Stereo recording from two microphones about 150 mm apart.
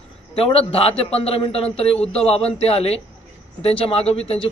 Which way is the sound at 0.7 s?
40° left (ahead or behind).